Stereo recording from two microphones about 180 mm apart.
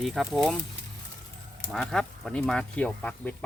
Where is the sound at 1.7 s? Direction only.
Centre (ahead or behind).